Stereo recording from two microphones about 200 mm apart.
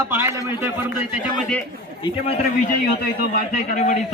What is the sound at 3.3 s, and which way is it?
Speech, 40° left (ahead or behind).